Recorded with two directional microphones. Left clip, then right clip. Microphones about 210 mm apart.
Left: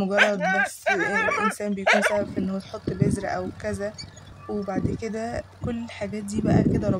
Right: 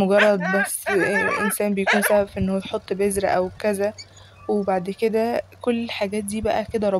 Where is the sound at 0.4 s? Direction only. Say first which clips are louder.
Right 1 dB; 50° left (ahead or behind).